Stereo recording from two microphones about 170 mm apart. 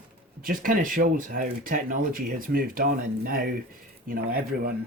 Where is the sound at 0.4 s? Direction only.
55° right (ahead or behind).